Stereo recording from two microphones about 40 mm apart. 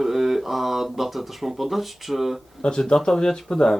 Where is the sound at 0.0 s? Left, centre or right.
Centre.